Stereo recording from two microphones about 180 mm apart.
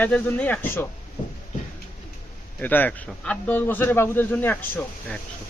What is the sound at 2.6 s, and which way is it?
Speech, 10° left (ahead or behind).